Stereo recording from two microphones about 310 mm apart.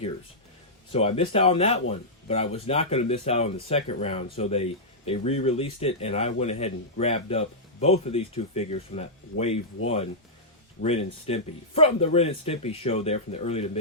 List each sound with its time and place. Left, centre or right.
0.9 s speech: centre